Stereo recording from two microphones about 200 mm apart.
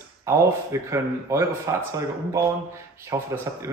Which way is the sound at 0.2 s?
15° right (ahead or behind).